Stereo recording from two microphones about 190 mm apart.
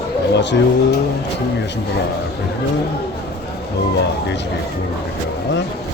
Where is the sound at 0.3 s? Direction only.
65° left (ahead or behind).